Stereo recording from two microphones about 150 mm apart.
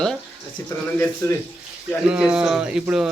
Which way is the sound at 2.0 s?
5° right (ahead or behind).